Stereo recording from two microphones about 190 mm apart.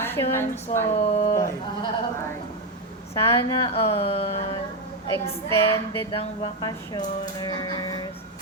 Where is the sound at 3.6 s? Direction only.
30° left (ahead or behind).